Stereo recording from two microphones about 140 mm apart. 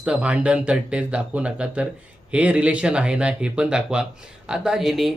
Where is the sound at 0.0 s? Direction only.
10° right (ahead or behind).